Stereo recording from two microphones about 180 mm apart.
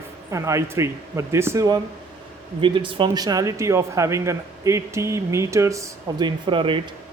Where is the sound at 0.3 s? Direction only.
15° right (ahead or behind).